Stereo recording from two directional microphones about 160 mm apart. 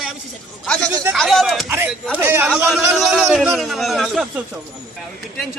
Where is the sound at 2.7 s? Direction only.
Centre (ahead or behind).